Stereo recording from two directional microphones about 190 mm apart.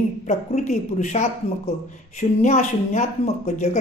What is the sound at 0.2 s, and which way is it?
Speech, 40° left (ahead or behind).